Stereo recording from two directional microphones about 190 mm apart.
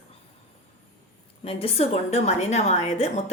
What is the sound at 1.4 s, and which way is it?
A woman's voice, 30° left (ahead or behind).